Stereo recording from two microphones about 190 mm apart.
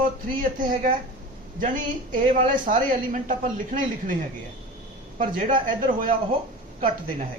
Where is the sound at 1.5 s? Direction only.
45° right (ahead or behind).